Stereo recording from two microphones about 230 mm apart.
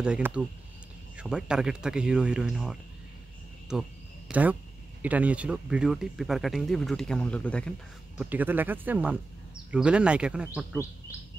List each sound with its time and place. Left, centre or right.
0.0 s speech: centre
8.2 s speech: centre